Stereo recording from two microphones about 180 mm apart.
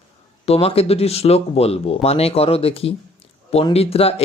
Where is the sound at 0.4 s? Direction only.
35° left (ahead or behind).